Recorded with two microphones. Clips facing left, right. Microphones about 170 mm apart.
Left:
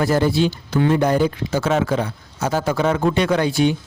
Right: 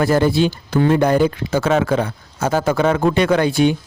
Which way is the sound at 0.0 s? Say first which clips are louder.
Right 2 dB; 55° right (ahead or behind).